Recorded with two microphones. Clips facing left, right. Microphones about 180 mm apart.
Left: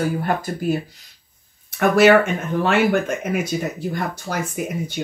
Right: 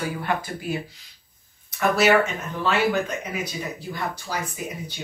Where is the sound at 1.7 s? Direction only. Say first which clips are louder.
Left 5 dB; 55° left (ahead or behind).